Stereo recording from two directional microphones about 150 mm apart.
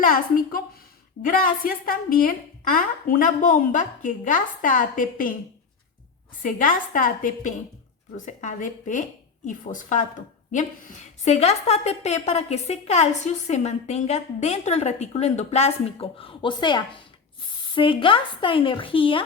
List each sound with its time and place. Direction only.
0.0 s a woman's voice: 70° left (ahead or behind)
6.4 s a woman's voice: 65° left (ahead or behind); by 19.2 s 35° left (ahead or behind)